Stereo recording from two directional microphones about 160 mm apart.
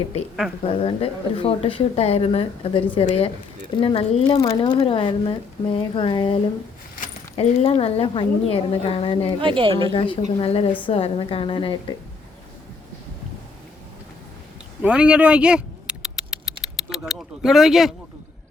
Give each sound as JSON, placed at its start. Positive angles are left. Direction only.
{"t": 0.6, "sound": "speech", "side_deg": 35}
{"t": 9.4, "sound": "speech", "side_deg": -30}
{"t": 9.9, "sound": "speech", "side_deg": 35}
{"t": 14.8, "sound": "a sound", "side_deg": -5}